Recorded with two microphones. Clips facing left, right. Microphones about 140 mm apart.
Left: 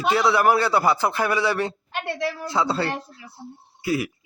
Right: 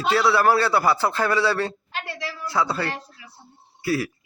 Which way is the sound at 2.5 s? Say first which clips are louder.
Right 1 dB; 25° left (ahead or behind).